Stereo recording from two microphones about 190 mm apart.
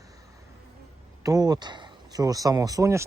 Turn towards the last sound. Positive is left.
turn(degrees=-15)  # may be behind; listen again after turning